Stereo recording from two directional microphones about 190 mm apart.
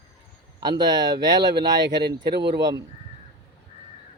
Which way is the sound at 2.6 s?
20° right (ahead or behind).